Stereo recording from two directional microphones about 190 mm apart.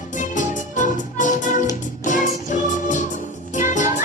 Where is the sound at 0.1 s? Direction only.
40° left (ahead or behind).